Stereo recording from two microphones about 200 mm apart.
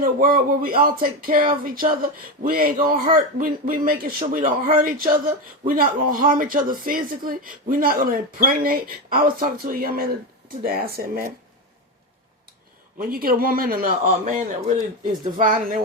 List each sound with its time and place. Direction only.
0.0 s a man's voice: 45° right (ahead or behind)
13.0 s a man's voice: 45° right (ahead or behind)